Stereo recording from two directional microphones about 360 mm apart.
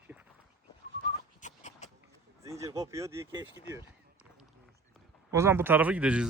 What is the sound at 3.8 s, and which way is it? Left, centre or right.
Run, centre.